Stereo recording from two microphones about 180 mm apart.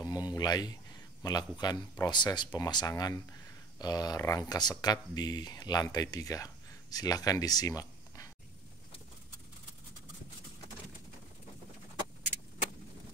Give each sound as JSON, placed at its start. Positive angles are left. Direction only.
{"t": 0.0, "sound": "speech", "side_deg": 20}